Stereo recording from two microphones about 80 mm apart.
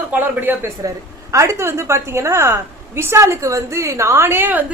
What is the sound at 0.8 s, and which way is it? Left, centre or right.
A woman's voice, right.